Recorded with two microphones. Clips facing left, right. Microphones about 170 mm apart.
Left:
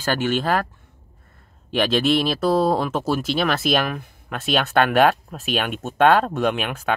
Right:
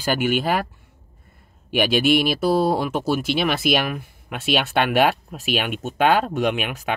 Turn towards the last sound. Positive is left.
turn(degrees=-5)  # may be behind; listen again after turning